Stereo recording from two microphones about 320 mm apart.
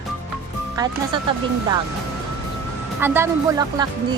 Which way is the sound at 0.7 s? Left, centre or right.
Centre.